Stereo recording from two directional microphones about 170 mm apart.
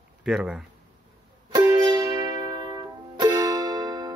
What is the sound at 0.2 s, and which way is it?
Speech, 5° right (ahead or behind).